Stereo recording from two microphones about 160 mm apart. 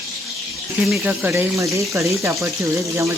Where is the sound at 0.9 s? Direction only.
5° right (ahead or behind).